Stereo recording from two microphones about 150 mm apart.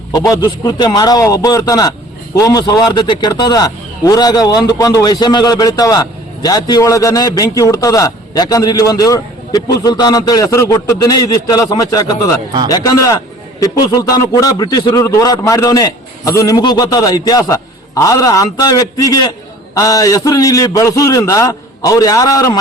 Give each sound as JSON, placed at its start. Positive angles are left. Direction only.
{"t": 0.1, "sound": "a man's voice", "side_deg": 25}